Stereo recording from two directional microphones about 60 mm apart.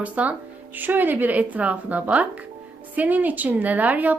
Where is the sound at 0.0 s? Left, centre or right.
Right.